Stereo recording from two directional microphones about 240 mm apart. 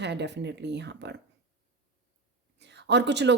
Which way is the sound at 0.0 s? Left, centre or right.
Right.